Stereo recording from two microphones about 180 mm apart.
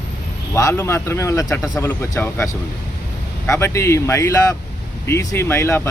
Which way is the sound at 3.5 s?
15° left (ahead or behind).